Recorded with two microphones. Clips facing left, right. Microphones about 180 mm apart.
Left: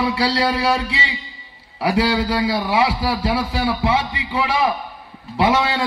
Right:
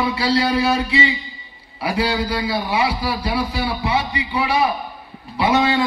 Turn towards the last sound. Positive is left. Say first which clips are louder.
# right 1 dB
turn(degrees=85)